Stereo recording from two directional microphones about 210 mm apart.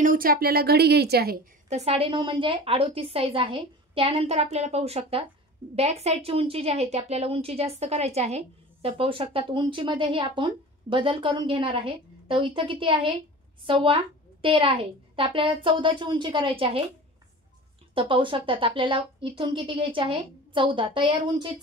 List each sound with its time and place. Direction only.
0.0 s a woman's voice: 40° right (ahead or behind); by 16.8 s 25° right (ahead or behind)
17.9 s a woman's voice: 25° right (ahead or behind)